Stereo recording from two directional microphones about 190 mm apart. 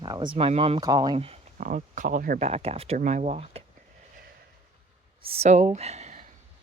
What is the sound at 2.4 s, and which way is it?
Speech, 30° right (ahead or behind).